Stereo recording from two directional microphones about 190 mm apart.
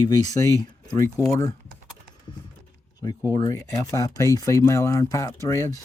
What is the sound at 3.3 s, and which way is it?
Speech, 20° left (ahead or behind).